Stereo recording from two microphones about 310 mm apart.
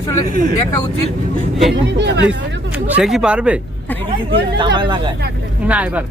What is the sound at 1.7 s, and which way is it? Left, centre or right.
Speech, right.